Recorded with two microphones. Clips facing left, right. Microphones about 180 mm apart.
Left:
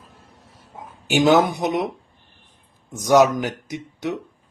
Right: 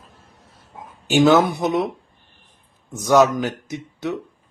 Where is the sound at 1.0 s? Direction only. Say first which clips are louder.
Right 1 dB; 15° left (ahead or behind).